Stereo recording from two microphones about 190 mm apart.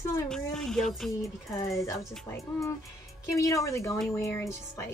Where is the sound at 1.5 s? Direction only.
15° left (ahead or behind).